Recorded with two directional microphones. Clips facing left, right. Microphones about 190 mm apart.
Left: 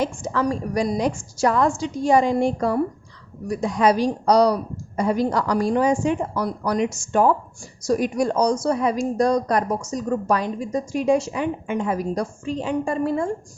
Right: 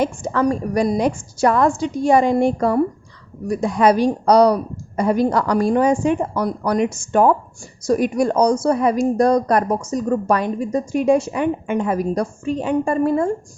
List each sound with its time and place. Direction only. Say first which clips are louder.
0.0 s a woman's voice: right 4 dB; 55° right (ahead or behind)